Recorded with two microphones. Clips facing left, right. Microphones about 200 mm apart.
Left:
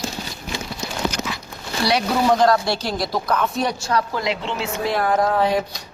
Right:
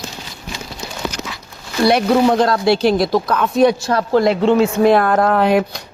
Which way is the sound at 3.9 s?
50° right (ahead or behind).